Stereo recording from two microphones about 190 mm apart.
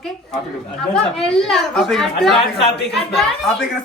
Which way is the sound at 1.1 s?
Centre (ahead or behind).